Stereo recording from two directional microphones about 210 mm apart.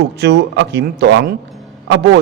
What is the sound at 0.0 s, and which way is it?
A man's voice, 55° right (ahead or behind).